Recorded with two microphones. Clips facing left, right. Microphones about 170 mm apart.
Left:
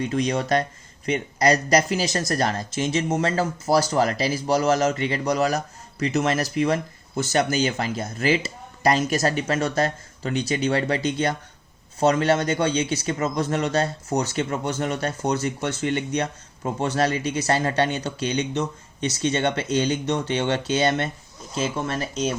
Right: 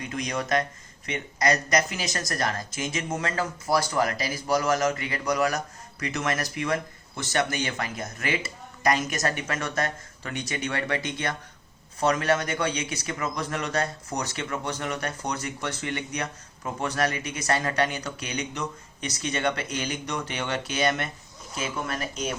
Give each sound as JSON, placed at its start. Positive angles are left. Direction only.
{"t": 0.0, "sound": "speech", "side_deg": 30}